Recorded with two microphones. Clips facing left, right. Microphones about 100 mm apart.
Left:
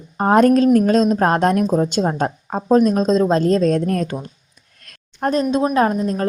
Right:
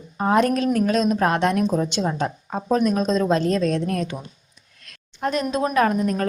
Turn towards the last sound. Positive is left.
turn(degrees=25)  # may be behind; listen again after turning